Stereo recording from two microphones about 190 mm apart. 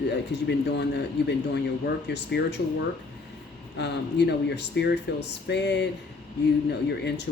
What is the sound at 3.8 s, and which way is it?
Speech, 65° left (ahead or behind).